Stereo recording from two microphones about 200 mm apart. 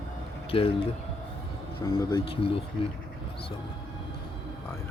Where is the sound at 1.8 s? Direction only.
15° left (ahead or behind).